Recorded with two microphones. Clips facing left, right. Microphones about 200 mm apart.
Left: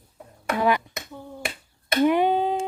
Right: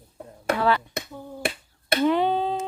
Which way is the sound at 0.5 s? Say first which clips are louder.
Left 1 dB; 15° left (ahead or behind).